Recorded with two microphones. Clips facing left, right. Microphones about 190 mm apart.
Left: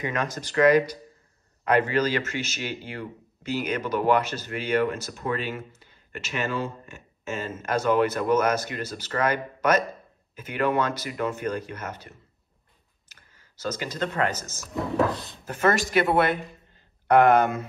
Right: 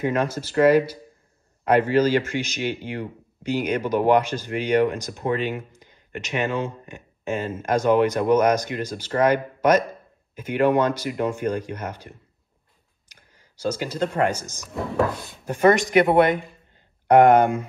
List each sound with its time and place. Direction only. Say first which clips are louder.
0.2 s speech: right 1 dB; 10° right (ahead or behind)
13.1 s speech: right 3 dB; 15° right (ahead or behind)
14.6 s speech: even; centre (ahead or behind)
15.4 s speech: right 6 dB; 15° right (ahead or behind)